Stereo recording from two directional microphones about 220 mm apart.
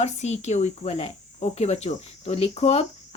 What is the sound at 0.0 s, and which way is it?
Speech, 30° left (ahead or behind).